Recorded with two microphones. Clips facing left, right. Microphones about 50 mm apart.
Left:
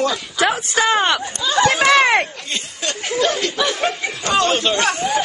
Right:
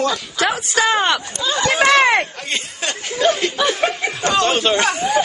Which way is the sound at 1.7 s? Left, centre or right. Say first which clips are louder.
Right 3 dB; centre.